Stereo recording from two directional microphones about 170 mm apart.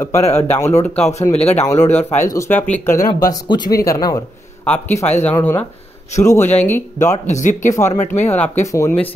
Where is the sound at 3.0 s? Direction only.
25° left (ahead or behind).